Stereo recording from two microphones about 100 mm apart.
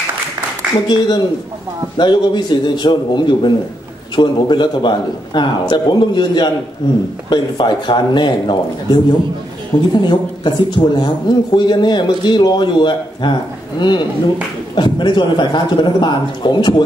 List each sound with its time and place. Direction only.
0.8 s a man's voice: 45° left (ahead or behind)